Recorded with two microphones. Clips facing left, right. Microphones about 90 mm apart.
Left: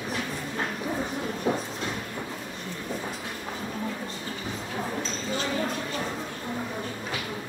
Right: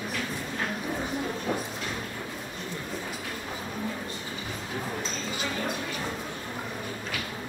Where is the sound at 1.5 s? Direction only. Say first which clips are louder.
Left 5 dB; 25° left (ahead or behind).